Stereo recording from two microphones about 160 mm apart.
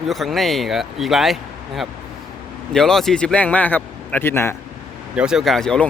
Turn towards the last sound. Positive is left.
turn(degrees=5)  # may be behind; listen again after turning